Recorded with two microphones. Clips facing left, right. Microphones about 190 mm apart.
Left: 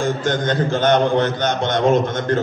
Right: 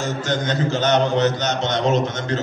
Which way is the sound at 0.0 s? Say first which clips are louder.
Left 3 dB; 55° left (ahead or behind).